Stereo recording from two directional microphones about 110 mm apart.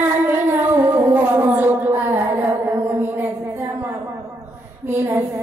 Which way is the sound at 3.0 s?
20° right (ahead or behind).